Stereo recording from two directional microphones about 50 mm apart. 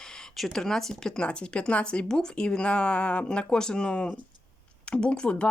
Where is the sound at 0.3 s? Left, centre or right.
Centre.